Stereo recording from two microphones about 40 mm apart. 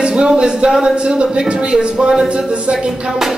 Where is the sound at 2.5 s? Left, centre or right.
Right.